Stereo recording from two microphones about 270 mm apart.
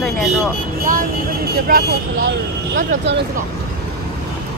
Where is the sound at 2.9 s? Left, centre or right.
Right.